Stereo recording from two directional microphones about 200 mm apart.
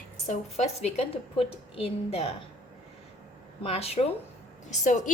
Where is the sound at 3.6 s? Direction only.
30° left (ahead or behind).